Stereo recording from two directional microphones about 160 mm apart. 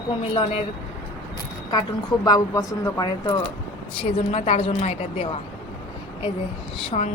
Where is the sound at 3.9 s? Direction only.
40° left (ahead or behind).